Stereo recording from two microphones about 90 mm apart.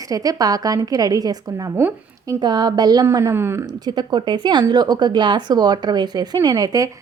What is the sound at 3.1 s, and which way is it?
Speech, 30° right (ahead or behind).